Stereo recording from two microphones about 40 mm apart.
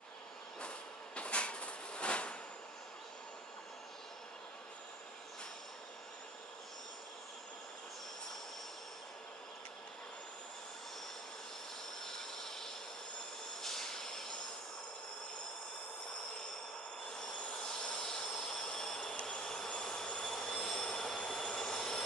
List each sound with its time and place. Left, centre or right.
0.6 s vehicle: left
12.0 s a sound: centre
13.6 s vehicle: centre
17.1 s a sound: left
18.0 s jet engine: centre
19.1 s train: left
19.4 s vehicle: centre
20.2 s train wheels squealing: centre
21.5 s a sound: centre